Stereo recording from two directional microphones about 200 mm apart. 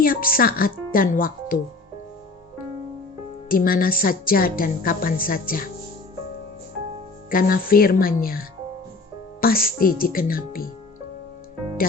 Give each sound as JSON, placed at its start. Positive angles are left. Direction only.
{"t": 0.0, "sound": "a woman's voice", "side_deg": 45}
{"t": 3.5, "sound": "a woman's voice", "side_deg": 45}
{"t": 7.3, "sound": "a woman's voice", "side_deg": 45}